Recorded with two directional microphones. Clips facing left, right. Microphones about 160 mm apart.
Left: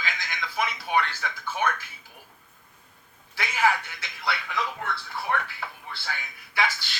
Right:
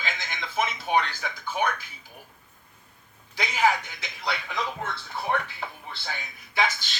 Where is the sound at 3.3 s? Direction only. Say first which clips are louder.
Right 1 dB; 15° right (ahead or behind).